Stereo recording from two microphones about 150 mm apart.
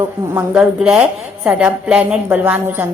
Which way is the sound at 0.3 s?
5° right (ahead or behind).